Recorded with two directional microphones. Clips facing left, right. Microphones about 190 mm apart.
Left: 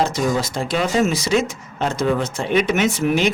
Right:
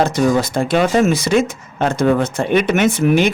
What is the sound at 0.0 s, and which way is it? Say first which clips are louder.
Speech: right 5 dB; 55° right (ahead or behind).